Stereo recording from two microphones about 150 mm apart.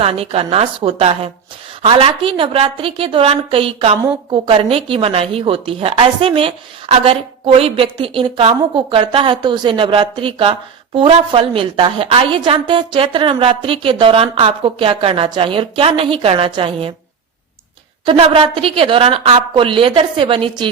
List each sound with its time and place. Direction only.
0.0 s a woman's voice: 40° right (ahead or behind)
18.0 s a woman's voice: 35° right (ahead or behind)